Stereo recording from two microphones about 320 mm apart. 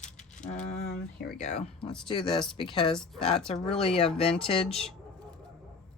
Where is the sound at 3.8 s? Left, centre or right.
Centre.